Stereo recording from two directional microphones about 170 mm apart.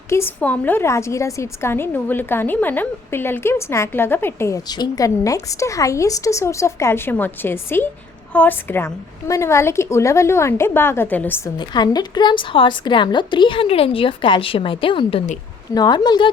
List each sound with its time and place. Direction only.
0.1 s a woman's voice: 15° left (ahead or behind)
11.5 s a woman's voice: 25° left (ahead or behind)